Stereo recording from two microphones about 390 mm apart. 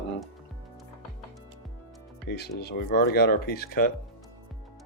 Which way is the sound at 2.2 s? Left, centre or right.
Left.